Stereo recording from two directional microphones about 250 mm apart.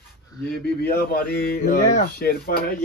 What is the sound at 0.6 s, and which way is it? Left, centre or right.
Speech, left.